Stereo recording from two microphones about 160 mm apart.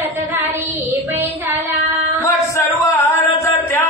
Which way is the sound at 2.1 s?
20° left (ahead or behind).